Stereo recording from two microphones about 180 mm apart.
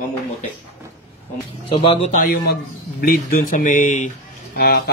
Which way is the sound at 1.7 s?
35° left (ahead or behind).